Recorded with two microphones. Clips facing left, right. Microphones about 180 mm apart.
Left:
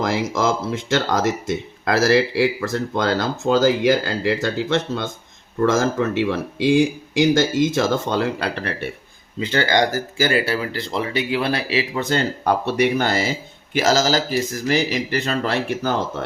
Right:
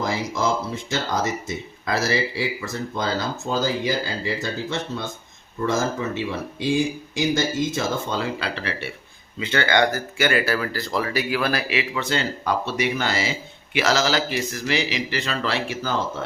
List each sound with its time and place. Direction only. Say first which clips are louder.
0.3 s speech: left 3 dB; 90° left
3.8 s speech: left 7 dB; 70° left (ahead or behind); by 8.9 s 55° left (ahead or behind)
9.4 s speech: left 2 dB; 35° left (ahead or behind)
11.9 s speech: left 4 dB; 50° left (ahead or behind)